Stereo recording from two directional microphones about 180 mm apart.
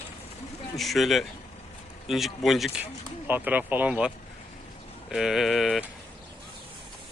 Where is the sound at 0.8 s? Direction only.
Centre (ahead or behind).